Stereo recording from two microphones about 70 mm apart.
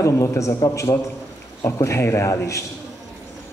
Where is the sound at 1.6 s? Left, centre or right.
Left.